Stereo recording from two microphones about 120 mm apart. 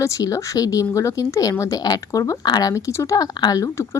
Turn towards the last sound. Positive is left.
turn(degrees=25)  # may be behind; listen again after turning